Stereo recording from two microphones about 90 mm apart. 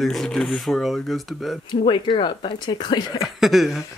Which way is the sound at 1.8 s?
65° left (ahead or behind).